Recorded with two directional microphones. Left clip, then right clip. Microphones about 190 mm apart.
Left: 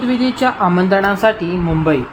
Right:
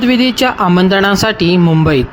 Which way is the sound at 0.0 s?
30° right (ahead or behind).